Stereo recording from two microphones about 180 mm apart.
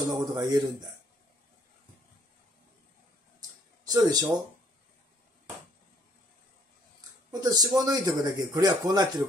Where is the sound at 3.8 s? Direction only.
20° right (ahead or behind).